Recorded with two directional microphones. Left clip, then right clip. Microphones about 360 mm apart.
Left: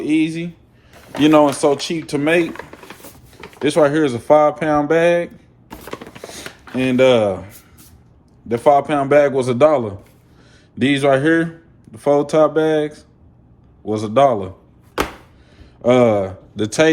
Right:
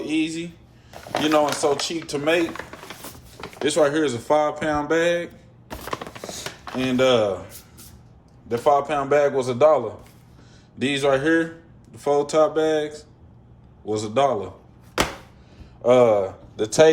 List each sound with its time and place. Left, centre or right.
0.0 s speech: centre
3.6 s speech: centre
5.8 s a sound: centre
6.2 s a sound: centre
8.4 s a man's voice: centre
15.8 s a man's voice: left